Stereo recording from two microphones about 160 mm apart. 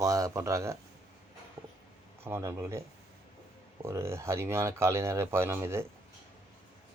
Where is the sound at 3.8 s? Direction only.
15° right (ahead or behind).